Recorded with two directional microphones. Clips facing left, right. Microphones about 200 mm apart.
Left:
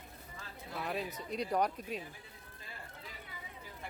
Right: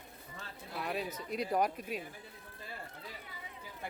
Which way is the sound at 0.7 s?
Centre (ahead or behind).